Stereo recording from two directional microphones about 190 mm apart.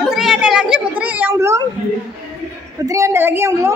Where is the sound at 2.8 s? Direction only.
15° right (ahead or behind).